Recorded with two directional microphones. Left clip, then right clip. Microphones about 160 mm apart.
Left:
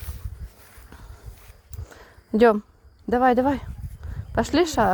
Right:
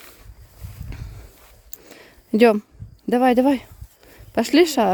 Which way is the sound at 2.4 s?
60° right (ahead or behind).